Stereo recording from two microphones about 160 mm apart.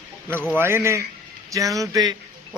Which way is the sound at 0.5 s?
15° right (ahead or behind).